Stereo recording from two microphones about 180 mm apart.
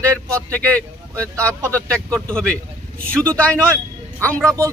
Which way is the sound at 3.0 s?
5° left (ahead or behind).